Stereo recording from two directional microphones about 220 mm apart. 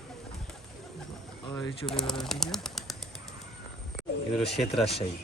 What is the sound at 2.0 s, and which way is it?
Speech, centre (ahead or behind).